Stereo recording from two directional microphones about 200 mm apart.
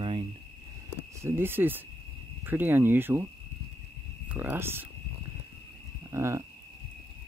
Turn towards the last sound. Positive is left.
turn(degrees=-15)  # may be behind; listen again after turning